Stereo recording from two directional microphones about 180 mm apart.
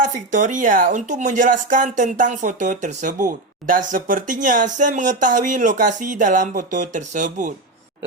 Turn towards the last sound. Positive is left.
turn(degrees=-45)  # may be behind; listen again after turning